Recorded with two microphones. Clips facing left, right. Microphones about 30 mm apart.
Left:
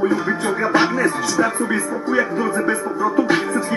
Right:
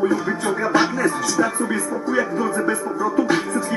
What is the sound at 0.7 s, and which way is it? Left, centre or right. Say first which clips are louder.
Music: left 2 dB; left.